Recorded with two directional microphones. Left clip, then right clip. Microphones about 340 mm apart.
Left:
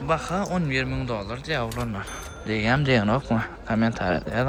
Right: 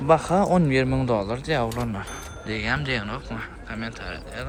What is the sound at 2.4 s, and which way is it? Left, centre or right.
Speech, centre.